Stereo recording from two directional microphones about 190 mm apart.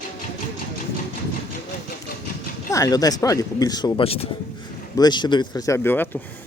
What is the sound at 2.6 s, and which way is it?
Speech, 20° left (ahead or behind).